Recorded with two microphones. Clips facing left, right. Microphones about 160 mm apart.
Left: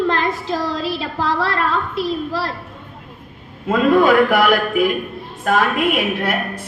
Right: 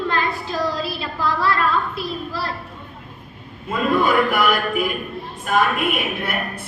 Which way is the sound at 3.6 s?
90° left.